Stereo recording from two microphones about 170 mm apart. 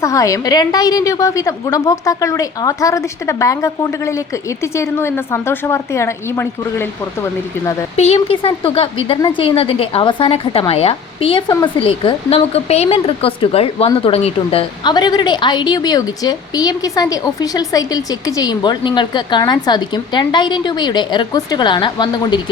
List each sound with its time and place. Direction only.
0.0 s a woman's voice: 20° left (ahead or behind)
7.9 s a woman's voice: 40° left (ahead or behind)
14.8 s a woman's voice: 25° left (ahead or behind)